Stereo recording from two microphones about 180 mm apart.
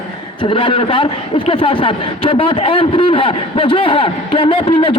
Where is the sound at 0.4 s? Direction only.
30° left (ahead or behind).